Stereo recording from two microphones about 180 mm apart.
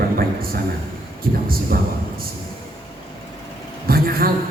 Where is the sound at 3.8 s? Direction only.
55° right (ahead or behind).